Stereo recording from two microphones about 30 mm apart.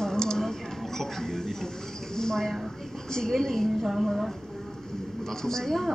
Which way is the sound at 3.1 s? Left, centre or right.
Centre.